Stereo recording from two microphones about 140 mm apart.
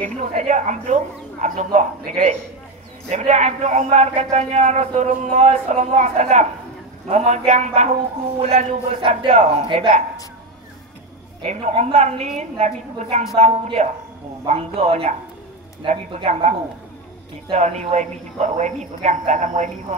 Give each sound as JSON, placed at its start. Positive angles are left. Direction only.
{"t": 0.0, "sound": "a woman's voice", "side_deg": -55}
{"t": 11.4, "sound": "a woman's voice", "side_deg": -50}